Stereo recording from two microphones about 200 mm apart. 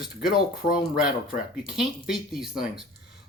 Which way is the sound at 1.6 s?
Centre (ahead or behind).